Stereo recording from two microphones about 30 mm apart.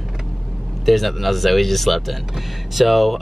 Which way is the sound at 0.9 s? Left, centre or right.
Centre.